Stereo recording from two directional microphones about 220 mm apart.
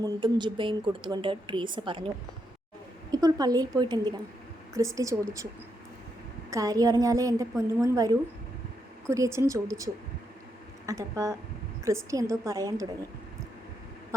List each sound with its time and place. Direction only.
0.0 s a woman's voice: 20° right (ahead or behind)
3.1 s a woman's voice: 15° right (ahead or behind)
6.5 s a woman's voice: 15° right (ahead or behind)